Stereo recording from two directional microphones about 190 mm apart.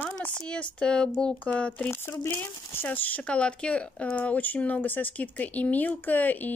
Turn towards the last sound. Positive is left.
turn(degrees=10)  # may be behind; listen again after turning